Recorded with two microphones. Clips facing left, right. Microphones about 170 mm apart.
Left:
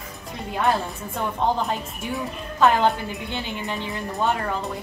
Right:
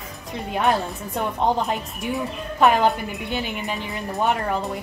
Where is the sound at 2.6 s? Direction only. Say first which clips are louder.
Right 1 dB; 15° right (ahead or behind).